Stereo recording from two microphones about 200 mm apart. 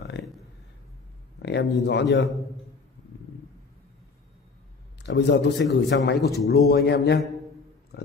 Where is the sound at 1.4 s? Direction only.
60° left (ahead or behind).